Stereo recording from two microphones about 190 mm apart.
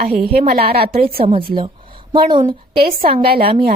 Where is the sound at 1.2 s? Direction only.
30° right (ahead or behind).